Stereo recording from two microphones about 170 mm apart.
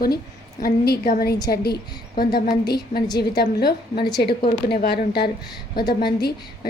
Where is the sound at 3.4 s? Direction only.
70° left (ahead or behind).